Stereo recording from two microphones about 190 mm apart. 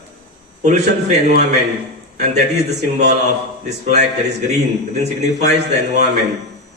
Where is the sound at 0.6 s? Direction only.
35° right (ahead or behind).